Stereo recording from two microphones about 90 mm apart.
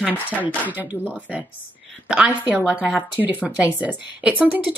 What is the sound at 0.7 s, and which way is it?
Speech, 20° right (ahead or behind).